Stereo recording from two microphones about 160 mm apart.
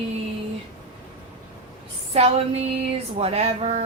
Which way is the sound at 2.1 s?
40° right (ahead or behind).